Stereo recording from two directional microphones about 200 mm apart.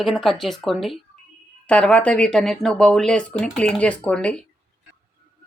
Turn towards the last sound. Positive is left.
turn(degrees=5)  # may be behind; listen again after turning